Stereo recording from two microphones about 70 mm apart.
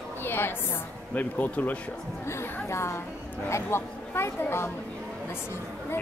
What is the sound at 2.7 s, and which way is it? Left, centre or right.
Speech, left.